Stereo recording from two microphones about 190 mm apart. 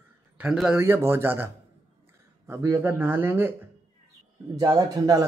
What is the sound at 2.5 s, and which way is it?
Speech, 15° right (ahead or behind).